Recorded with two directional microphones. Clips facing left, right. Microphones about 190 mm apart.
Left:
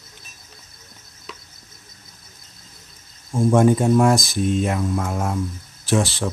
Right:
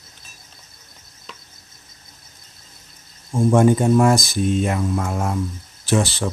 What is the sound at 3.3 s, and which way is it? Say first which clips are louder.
Speech: right 1 dB; centre (ahead or behind).